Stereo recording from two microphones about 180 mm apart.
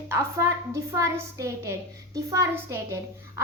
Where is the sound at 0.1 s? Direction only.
15° right (ahead or behind).